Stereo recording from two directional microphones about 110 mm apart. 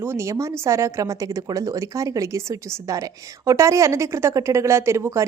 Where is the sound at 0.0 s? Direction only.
25° right (ahead or behind).